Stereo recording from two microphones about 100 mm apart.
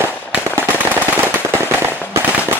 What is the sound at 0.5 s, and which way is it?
Machine gun, 20° right (ahead or behind).